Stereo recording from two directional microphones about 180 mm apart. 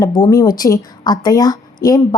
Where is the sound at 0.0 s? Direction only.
20° left (ahead or behind).